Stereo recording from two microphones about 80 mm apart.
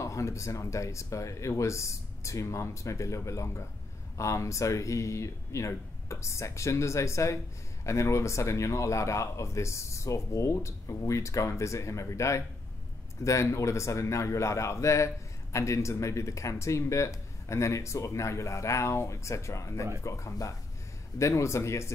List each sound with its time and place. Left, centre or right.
0.0 s a man's voice: left